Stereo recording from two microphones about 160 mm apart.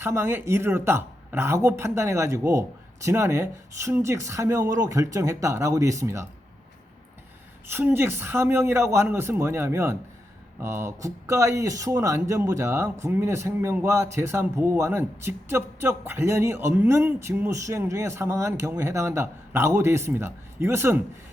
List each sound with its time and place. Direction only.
0.0 s speech: 15° right (ahead or behind)
7.7 s speech: 15° right (ahead or behind)